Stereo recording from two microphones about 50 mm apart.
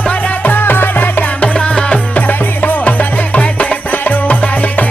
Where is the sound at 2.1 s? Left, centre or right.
Left.